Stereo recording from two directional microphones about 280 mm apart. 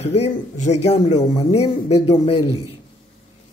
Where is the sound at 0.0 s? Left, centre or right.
Left.